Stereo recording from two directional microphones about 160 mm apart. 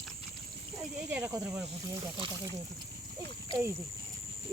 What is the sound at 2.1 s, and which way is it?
Speech, 30° right (ahead or behind).